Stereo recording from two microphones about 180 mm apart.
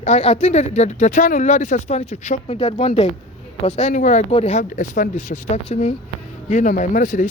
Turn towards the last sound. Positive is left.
turn(degrees=45)  # may be behind; listen again after turning